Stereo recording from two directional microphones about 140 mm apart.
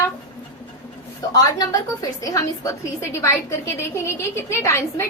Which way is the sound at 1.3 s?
25° left (ahead or behind).